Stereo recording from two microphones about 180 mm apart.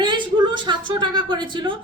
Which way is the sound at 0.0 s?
25° right (ahead or behind).